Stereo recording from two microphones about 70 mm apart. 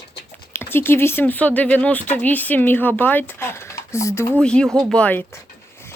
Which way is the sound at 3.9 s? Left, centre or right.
Left.